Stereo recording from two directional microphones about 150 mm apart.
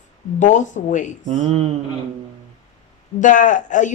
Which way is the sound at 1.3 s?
45° right (ahead or behind).